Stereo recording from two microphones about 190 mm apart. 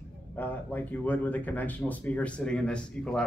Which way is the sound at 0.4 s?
10° left (ahead or behind).